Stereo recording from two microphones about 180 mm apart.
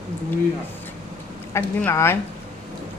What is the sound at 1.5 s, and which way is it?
Speech, 15° left (ahead or behind).